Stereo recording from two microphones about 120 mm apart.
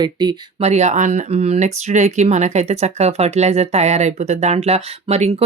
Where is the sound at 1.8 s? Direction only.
70° right (ahead or behind).